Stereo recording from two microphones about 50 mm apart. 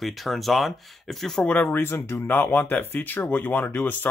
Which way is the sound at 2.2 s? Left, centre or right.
Left.